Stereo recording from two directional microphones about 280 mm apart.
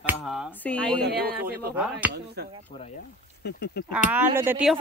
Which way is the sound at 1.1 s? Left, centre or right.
Right.